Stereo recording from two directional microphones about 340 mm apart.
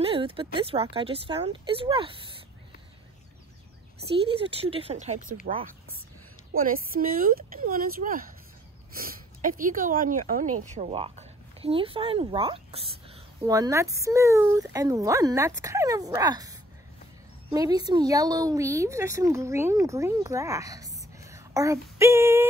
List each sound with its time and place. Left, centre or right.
0.0 s speech: centre
4.4 s speech: centre